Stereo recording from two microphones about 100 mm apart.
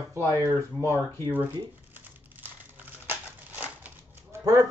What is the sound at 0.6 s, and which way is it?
Speech, 25° right (ahead or behind).